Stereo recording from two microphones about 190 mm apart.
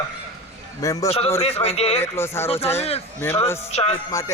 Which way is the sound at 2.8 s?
30° left (ahead or behind).